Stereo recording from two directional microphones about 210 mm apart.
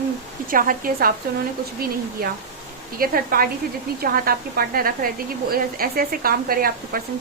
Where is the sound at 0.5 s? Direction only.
40° right (ahead or behind).